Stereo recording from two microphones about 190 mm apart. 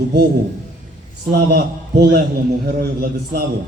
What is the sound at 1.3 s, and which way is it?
A man's voice, 55° right (ahead or behind).